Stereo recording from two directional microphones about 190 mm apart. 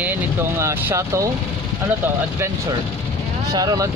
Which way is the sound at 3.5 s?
20° right (ahead or behind).